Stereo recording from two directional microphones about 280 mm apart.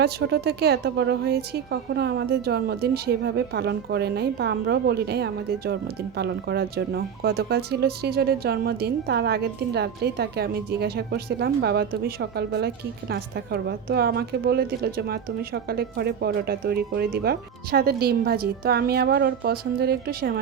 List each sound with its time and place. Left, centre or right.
0.0 s speech: right